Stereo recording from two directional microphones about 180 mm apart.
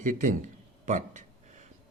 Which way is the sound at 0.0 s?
45° right (ahead or behind).